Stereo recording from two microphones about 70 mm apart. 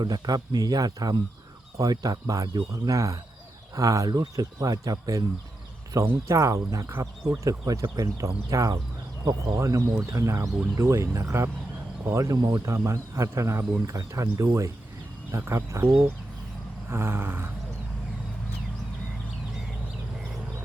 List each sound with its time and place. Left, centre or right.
0.0 s speech: right
6.2 s speech: right
9.2 s speech: right
9.6 s speech: right
15.3 s speech: right
16.9 s speech: right